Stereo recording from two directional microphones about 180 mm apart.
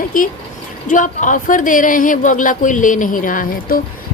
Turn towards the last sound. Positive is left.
turn(degrees=50)  # may be behind; listen again after turning